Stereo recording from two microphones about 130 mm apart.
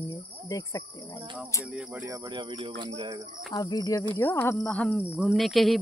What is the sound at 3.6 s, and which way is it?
Speech, 25° left (ahead or behind).